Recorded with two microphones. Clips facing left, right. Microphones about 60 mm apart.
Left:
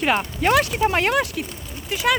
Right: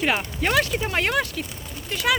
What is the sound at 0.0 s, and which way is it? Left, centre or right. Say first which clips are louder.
Speech: left 3 dB; centre.